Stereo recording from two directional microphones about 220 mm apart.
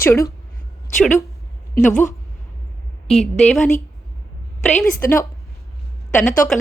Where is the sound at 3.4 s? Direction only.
Centre (ahead or behind).